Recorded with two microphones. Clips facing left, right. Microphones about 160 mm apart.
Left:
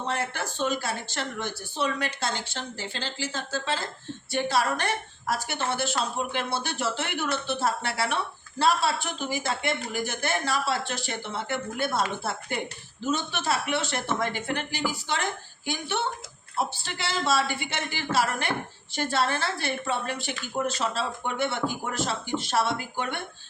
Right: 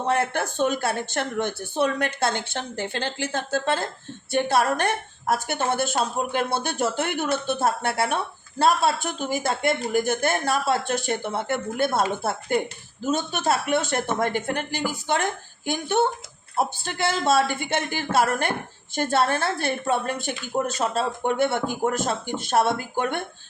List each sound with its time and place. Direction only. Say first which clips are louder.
0.0 s a woman's voice: right 7 dB; 55° right (ahead or behind)